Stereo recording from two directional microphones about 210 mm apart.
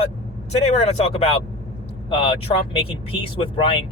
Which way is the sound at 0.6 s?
30° left (ahead or behind).